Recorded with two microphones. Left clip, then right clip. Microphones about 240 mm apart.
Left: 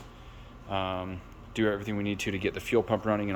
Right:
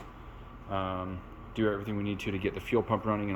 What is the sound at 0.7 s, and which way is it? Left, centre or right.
Speech, centre.